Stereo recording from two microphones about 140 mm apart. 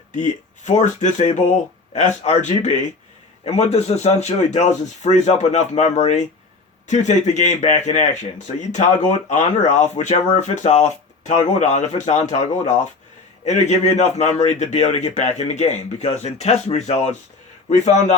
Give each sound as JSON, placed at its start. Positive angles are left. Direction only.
{"t": 0.1, "sound": "a man's voice", "side_deg": 60}